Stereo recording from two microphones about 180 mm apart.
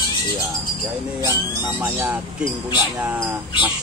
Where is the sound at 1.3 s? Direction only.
15° right (ahead or behind).